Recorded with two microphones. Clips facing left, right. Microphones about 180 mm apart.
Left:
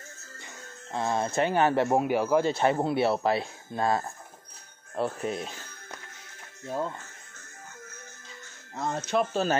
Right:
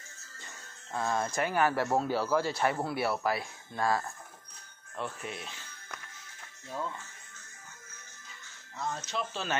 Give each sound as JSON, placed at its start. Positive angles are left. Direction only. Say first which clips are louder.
{"t": 0.9, "sound": "speech", "louder": "left 4 dB", "side_deg": 20}
{"t": 4.9, "sound": "speech", "louder": "left 9 dB", "side_deg": 40}
{"t": 8.7, "sound": "speech", "louder": "left 8 dB", "side_deg": 55}